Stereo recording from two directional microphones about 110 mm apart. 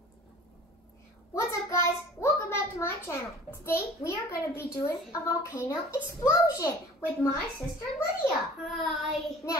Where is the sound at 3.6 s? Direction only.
25° left (ahead or behind).